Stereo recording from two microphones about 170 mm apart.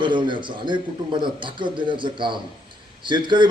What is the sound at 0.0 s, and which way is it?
A man's voice, 30° right (ahead or behind).